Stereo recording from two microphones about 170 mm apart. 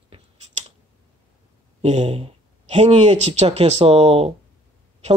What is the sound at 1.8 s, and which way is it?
Speech, 40° right (ahead or behind).